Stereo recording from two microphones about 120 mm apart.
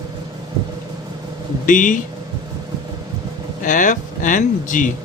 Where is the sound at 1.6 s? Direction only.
90° left.